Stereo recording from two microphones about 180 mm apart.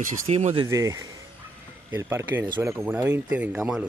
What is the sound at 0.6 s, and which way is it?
Speech, 15° right (ahead or behind).